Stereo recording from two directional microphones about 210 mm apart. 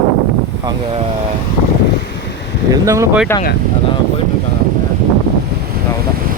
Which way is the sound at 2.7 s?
15° right (ahead or behind).